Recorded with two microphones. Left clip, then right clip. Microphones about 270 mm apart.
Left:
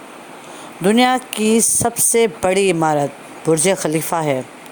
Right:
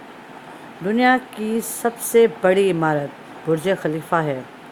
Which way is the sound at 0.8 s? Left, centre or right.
Left.